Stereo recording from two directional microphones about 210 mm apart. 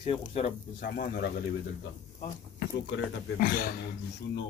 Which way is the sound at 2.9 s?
45° left (ahead or behind).